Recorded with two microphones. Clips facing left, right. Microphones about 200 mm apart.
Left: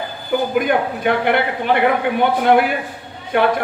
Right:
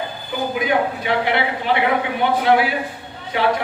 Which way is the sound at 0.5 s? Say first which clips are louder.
Left 2 dB; 55° left (ahead or behind).